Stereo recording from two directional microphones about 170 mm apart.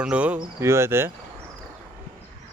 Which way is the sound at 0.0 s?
5° right (ahead or behind).